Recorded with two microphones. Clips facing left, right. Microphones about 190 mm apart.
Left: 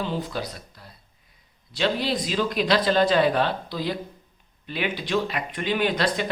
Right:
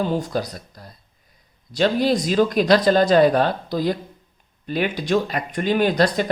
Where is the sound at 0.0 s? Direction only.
45° right (ahead or behind).